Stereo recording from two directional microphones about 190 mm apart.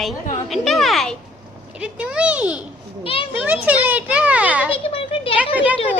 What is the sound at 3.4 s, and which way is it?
A child's voice, 10° right (ahead or behind).